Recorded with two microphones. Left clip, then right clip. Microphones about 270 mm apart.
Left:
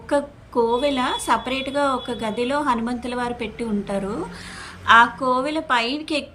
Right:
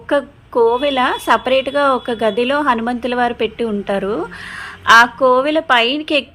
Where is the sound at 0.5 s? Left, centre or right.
Right.